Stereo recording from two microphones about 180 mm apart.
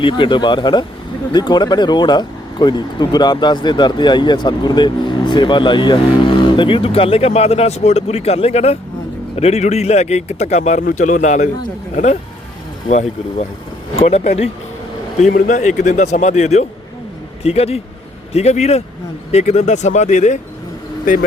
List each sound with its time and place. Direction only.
0.0 s speech: 25° left (ahead or behind)
13.9 s speech: 35° left (ahead or behind)